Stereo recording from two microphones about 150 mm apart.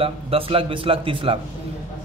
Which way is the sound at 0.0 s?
40° right (ahead or behind).